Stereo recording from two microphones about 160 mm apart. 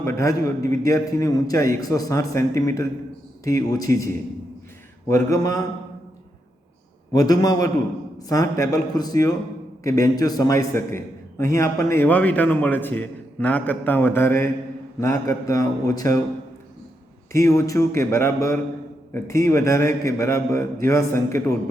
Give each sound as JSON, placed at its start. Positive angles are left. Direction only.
{"t": 0.0, "sound": "a man's voice", "side_deg": 20}
{"t": 7.1, "sound": "a man's voice", "side_deg": 25}
{"t": 17.3, "sound": "a man's voice", "side_deg": 20}